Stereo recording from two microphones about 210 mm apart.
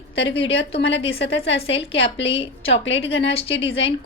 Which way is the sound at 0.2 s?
60° left (ahead or behind).